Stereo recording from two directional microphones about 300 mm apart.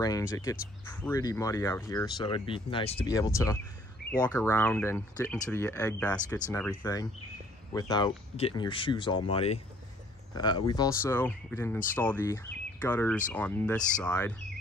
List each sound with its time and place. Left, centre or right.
0.0 s speech: centre